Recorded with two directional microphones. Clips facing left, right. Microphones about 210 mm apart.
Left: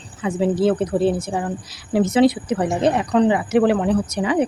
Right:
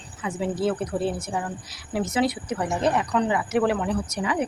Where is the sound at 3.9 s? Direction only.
90° left.